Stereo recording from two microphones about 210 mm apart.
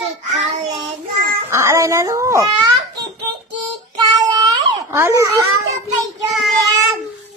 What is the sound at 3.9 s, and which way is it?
Babbling, 20° right (ahead or behind).